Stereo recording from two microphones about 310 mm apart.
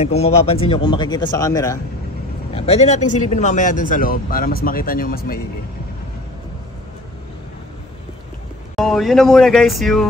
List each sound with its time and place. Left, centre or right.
0.0 s a man's voice: centre
8.7 s speech: centre